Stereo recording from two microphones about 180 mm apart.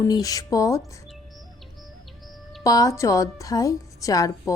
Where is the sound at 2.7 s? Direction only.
20° left (ahead or behind).